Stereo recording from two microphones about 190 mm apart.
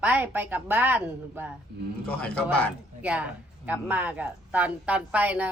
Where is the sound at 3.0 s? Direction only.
5° right (ahead or behind).